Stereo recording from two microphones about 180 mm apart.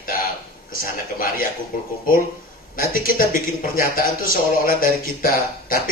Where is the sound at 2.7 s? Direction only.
55° left (ahead or behind).